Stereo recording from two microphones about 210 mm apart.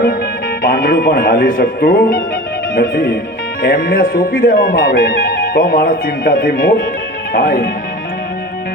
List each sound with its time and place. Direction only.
0.6 s speech: 40° left (ahead or behind)